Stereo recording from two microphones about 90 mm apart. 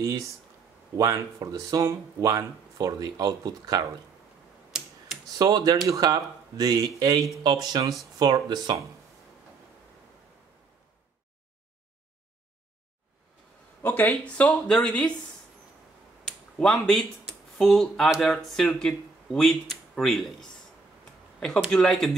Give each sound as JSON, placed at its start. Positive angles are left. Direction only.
{"t": 0.0, "sound": "speech", "side_deg": -35}
{"t": 5.4, "sound": "speech", "side_deg": -45}
{"t": 13.8, "sound": "speech", "side_deg": 20}
{"t": 16.5, "sound": "speech", "side_deg": 10}
{"t": 17.3, "sound": "a sound", "side_deg": 5}
{"t": 18.2, "sound": "speech", "side_deg": 5}
{"t": 21.6, "sound": "speech", "side_deg": 5}